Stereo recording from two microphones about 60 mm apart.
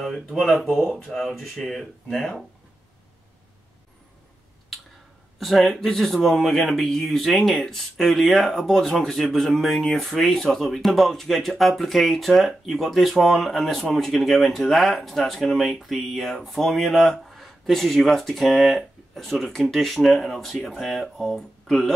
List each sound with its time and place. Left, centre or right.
0.0 s speech: centre
5.4 s speech: centre